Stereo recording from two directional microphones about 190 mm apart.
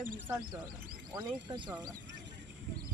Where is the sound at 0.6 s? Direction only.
50° right (ahead or behind).